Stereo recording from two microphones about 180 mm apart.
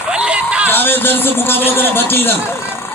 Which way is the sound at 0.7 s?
10° left (ahead or behind).